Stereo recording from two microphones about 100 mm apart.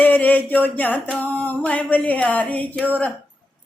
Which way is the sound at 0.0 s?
15° left (ahead or behind).